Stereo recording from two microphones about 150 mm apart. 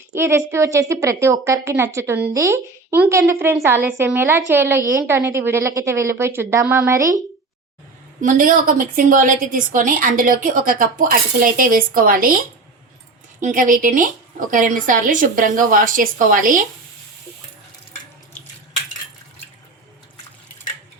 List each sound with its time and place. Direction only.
0.1 s a woman's voice: 15° right (ahead or behind)
8.2 s a woman's voice: 60° right (ahead or behind)
13.4 s a woman's voice: 60° right (ahead or behind)